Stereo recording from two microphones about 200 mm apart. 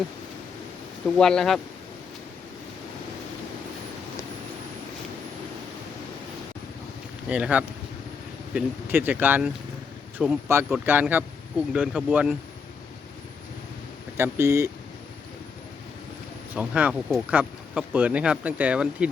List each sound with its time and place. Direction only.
1.0 s speech: centre (ahead or behind)
7.3 s speech: 5° right (ahead or behind)
14.2 s speech: 15° right (ahead or behind)
16.6 s speech: 5° right (ahead or behind)